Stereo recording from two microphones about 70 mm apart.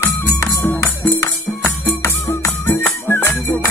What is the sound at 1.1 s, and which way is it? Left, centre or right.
Music, left.